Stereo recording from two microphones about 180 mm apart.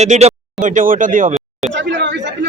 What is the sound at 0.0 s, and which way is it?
Speech, 40° right (ahead or behind).